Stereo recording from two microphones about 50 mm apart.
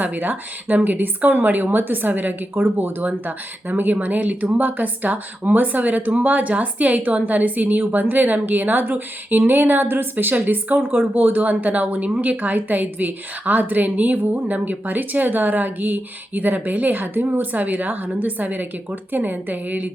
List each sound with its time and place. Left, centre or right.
0.0 s speech: right
3.0 s speech: right